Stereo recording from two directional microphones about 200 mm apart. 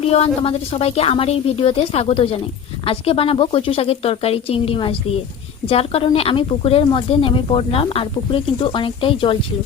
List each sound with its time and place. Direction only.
0.0 s speech: 30° left (ahead or behind)